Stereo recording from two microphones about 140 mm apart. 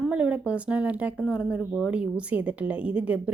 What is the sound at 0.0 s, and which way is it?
Speech, 10° right (ahead or behind).